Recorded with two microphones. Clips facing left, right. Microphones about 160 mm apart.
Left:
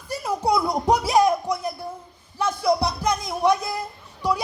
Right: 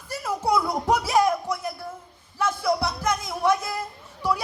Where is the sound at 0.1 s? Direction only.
15° left (ahead or behind).